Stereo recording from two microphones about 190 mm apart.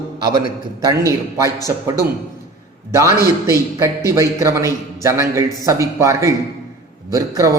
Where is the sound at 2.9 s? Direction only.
15° right (ahead or behind).